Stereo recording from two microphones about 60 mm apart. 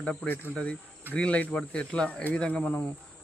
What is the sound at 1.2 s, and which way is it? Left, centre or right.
Speech, left.